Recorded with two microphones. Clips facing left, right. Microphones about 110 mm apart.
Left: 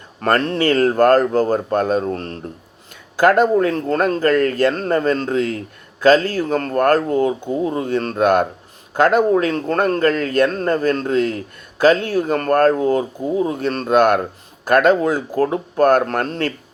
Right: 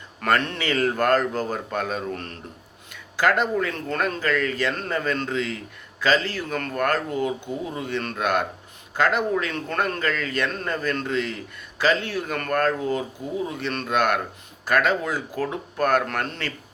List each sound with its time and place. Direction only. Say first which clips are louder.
0.2 s speech: left 6 dB; 35° left (ahead or behind)
2.9 s speech: left 8 dB; 45° left (ahead or behind)
12.8 s speech: left 8 dB; 55° left (ahead or behind)